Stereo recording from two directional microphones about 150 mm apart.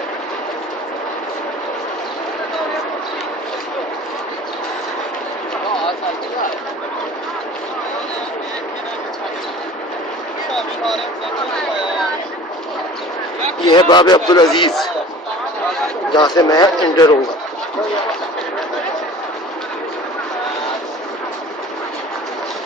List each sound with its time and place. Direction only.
13.7 s speech: 30° left (ahead or behind)
16.3 s a man's voice: 25° left (ahead or behind)